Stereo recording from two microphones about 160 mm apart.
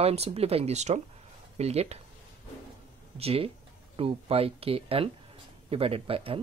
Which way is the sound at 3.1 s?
40° right (ahead or behind).